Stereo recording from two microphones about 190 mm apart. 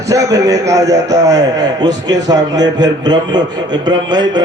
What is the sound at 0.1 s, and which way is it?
A man's voice, 20° right (ahead or behind).